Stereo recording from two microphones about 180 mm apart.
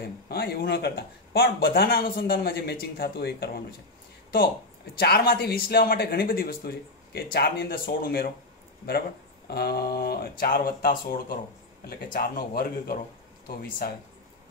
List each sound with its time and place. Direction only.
0.0 s speech: 60° left (ahead or behind)
4.9 s speech: 60° left (ahead or behind)
9.5 s speech: 60° left (ahead or behind)